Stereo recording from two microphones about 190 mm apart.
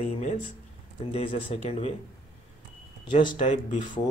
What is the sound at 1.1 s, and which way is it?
Speech, 30° left (ahead or behind).